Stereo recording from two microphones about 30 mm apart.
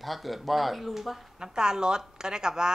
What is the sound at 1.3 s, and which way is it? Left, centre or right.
A woman's voice, right.